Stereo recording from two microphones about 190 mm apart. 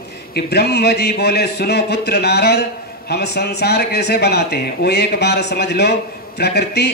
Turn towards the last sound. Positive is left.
turn(degrees=60)  # may be behind; listen again after turning